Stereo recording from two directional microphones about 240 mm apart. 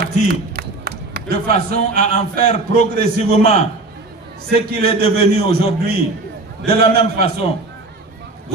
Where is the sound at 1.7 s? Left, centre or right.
Left.